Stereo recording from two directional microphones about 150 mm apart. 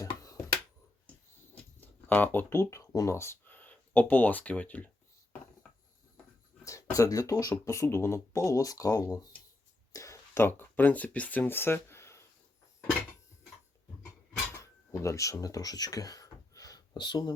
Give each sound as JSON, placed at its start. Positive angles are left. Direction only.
{"t": 1.8, "sound": "speech", "side_deg": 10}
{"t": 6.7, "sound": "speech", "side_deg": 20}
{"t": 14.6, "sound": "a sound", "side_deg": 20}